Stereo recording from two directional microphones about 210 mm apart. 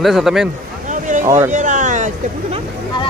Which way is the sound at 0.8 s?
35° right (ahead or behind).